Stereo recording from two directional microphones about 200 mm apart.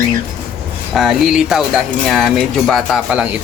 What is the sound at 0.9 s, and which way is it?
Speech, centre (ahead or behind).